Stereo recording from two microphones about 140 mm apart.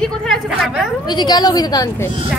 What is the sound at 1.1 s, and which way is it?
Speech, 30° left (ahead or behind).